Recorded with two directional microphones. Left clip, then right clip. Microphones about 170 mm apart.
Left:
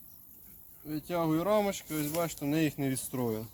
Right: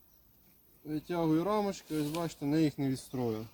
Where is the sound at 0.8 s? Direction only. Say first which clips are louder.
Left 1 dB; 25° left (ahead or behind).